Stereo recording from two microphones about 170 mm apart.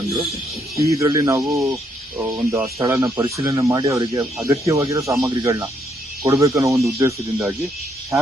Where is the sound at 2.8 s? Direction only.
20° right (ahead or behind).